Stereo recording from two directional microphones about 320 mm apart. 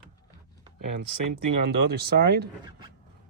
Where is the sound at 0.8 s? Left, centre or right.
Right.